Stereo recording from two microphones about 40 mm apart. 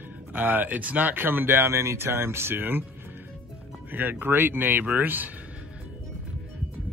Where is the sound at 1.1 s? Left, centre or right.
Right.